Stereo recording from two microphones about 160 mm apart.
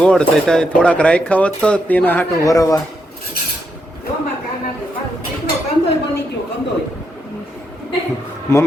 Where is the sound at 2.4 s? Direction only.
20° left (ahead or behind).